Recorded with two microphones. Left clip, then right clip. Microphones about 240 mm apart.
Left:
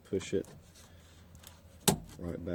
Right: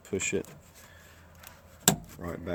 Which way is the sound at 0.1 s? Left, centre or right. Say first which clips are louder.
Right 3 dB; centre.